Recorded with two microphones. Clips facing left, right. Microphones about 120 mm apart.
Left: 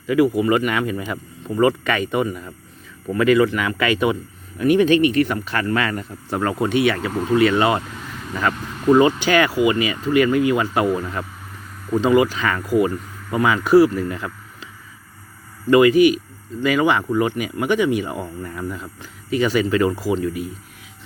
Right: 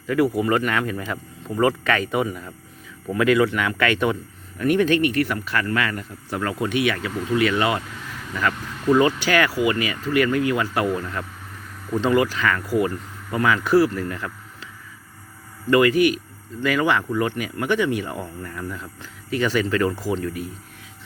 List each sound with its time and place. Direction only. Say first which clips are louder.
0.1 s speech: left 3 dB; centre (ahead or behind)
4.6 s speech: left 4 dB; 15° left (ahead or behind)
15.7 s speech: left 4 dB; 20° left (ahead or behind)